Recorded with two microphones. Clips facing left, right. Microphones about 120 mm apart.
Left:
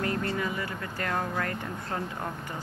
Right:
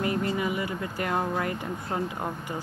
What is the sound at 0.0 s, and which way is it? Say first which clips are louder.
Speech: right 3 dB; 15° right (ahead or behind).